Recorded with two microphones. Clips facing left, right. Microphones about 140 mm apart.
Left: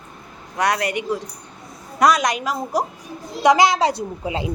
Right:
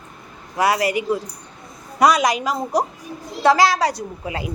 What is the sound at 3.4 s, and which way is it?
A woman's voice, 20° left (ahead or behind).